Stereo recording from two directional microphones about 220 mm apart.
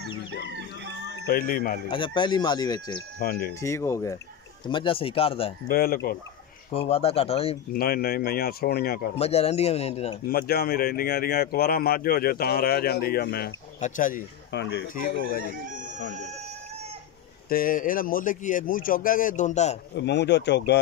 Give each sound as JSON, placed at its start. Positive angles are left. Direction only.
{"t": 1.2, "sound": "speech", "side_deg": 40}
{"t": 1.9, "sound": "speech", "side_deg": 20}
{"t": 3.2, "sound": "speech", "side_deg": 45}
{"t": 3.6, "sound": "speech", "side_deg": 15}
{"t": 5.7, "sound": "speech", "side_deg": 40}
{"t": 6.7, "sound": "speech", "side_deg": 25}
{"t": 7.7, "sound": "speech", "side_deg": 45}
{"t": 9.1, "sound": "speech", "side_deg": 25}
{"t": 10.2, "sound": "speech", "side_deg": 45}
{"t": 13.7, "sound": "speech", "side_deg": 35}
{"t": 14.5, "sound": "speech", "side_deg": 50}
{"t": 17.5, "sound": "speech", "side_deg": 40}
{"t": 20.0, "sound": "speech", "side_deg": 50}